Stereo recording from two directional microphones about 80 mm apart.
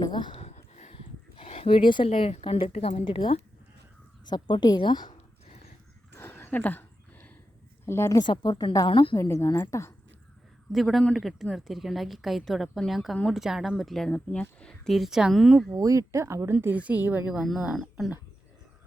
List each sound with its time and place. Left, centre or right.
0.0 s speech: left
1.7 s speech: left
4.8 s speech: left
6.1 s a sound: left
7.9 s a woman's voice: left
8.2 s a woman's voice: left
8.9 s speech: left
9.1 s a woman's voice: left
10.7 s a woman's voice: centre
14.1 s speech: centre
14.9 s a woman's voice: centre
15.7 s a woman's voice: right; by 17.4 s centre
17.7 s a woman's voice: centre